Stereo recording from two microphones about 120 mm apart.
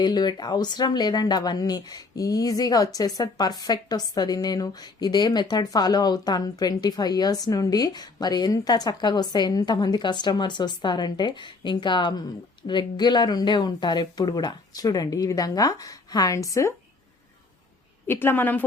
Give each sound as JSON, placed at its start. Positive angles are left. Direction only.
{"t": 0.0, "sound": "speech", "side_deg": 35}
{"t": 18.1, "sound": "a woman's voice", "side_deg": 20}